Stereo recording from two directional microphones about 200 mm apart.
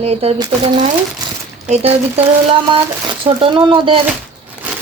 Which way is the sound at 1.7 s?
30° right (ahead or behind).